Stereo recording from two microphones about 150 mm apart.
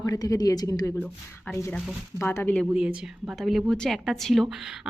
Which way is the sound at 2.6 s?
5° right (ahead or behind).